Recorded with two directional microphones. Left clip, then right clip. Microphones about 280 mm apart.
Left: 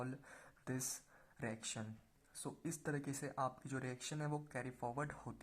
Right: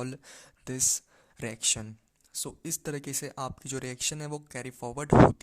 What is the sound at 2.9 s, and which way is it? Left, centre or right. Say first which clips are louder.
Speech: right 8 dB; right.